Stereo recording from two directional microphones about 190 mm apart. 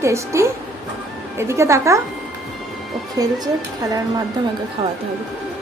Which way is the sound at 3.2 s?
20° right (ahead or behind).